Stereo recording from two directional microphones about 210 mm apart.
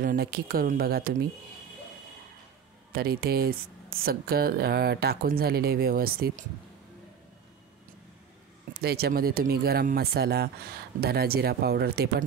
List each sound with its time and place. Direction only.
0.0 s speech: 45° right (ahead or behind)
2.9 s speech: 45° right (ahead or behind)
8.7 s speech: 50° right (ahead or behind)